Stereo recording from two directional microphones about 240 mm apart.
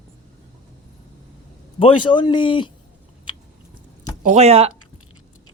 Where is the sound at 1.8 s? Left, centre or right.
Centre.